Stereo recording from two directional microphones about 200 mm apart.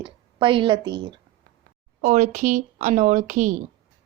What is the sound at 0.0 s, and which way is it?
A woman's voice, 25° right (ahead or behind).